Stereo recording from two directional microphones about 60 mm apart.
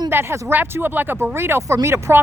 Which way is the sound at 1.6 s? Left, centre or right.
Right.